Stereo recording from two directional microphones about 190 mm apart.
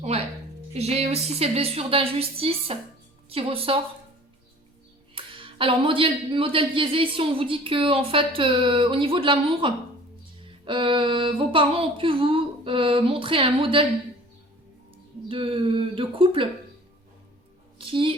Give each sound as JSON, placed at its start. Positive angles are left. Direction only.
{"t": 0.1, "sound": "a woman's voice", "side_deg": -35}
{"t": 5.1, "sound": "speech", "side_deg": -25}
{"t": 15.3, "sound": "speech", "side_deg": -30}
{"t": 17.7, "sound": "a sound", "side_deg": -25}